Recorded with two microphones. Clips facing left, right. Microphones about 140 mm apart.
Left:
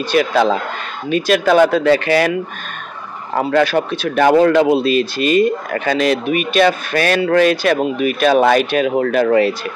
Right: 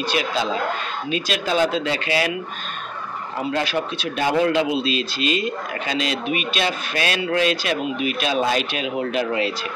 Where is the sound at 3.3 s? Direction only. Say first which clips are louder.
Left 9 dB; 55° left (ahead or behind).